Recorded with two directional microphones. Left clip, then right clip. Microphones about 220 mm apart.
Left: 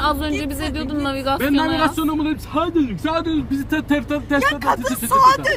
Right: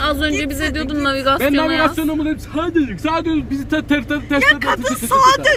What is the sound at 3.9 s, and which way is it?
Speech, 30° left (ahead or behind).